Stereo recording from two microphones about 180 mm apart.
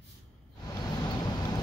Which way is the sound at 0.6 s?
25° left (ahead or behind).